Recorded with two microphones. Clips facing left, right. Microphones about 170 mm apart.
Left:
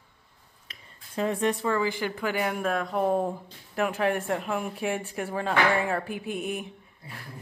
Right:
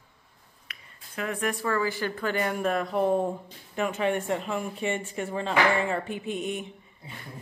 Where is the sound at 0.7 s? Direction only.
30° left (ahead or behind).